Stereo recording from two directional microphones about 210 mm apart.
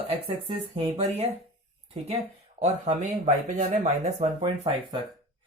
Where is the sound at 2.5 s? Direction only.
30° right (ahead or behind).